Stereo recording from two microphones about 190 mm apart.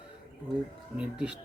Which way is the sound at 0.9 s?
5° right (ahead or behind).